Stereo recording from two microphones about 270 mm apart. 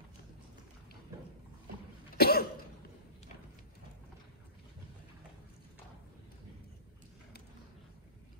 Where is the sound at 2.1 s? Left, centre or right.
Left.